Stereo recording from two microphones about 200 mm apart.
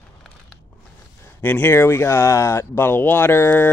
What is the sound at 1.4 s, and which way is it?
Speech, 10° left (ahead or behind).